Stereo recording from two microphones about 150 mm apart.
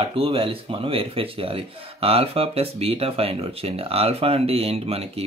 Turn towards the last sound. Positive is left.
turn(degrees=-40)  # may be behind; listen again after turning